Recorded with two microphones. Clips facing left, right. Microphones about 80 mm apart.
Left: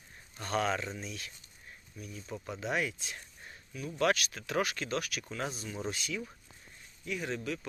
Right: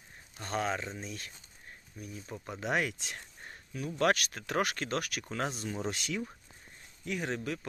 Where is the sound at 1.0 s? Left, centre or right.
Right.